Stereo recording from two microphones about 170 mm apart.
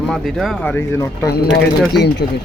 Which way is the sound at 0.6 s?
15° left (ahead or behind).